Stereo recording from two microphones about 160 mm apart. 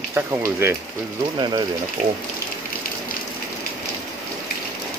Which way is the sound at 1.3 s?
25° right (ahead or behind).